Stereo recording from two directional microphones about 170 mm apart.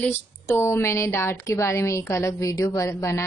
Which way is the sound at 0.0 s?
15° left (ahead or behind).